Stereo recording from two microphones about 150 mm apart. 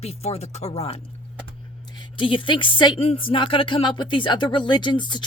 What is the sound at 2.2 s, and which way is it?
Speech, 35° left (ahead or behind).